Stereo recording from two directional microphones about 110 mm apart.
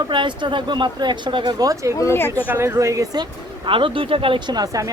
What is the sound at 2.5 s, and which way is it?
Speech, 20° right (ahead or behind).